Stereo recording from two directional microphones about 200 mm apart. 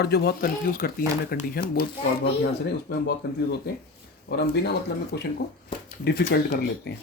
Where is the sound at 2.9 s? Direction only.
55° left (ahead or behind).